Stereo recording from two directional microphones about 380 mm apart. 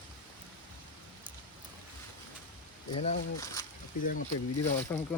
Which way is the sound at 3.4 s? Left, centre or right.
Centre.